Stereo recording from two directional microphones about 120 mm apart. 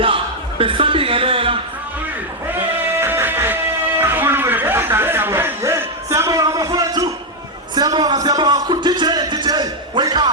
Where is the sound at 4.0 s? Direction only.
15° right (ahead or behind).